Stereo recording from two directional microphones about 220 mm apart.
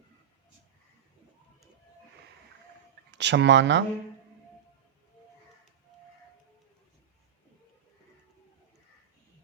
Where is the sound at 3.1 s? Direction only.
55° right (ahead or behind).